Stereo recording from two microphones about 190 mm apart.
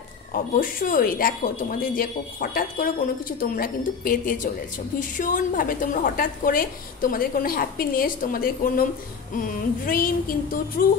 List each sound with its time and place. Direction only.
0.3 s speech: 45° left (ahead or behind)